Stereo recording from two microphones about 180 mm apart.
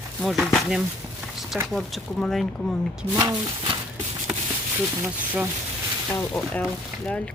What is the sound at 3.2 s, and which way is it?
Speech, 20° right (ahead or behind).